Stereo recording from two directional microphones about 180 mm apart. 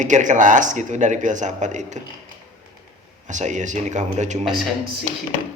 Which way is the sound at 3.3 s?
40° right (ahead or behind).